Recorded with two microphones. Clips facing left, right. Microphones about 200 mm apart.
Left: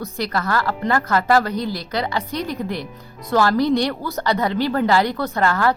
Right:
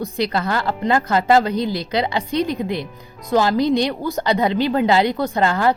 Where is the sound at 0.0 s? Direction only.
25° right (ahead or behind).